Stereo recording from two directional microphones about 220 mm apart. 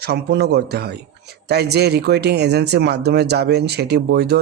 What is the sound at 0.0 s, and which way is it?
Speech, 50° right (ahead or behind).